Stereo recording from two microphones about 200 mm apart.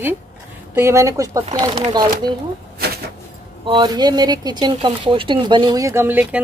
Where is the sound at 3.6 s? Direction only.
25° right (ahead or behind).